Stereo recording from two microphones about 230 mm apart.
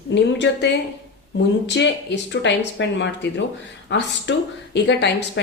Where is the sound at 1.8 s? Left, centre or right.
Left.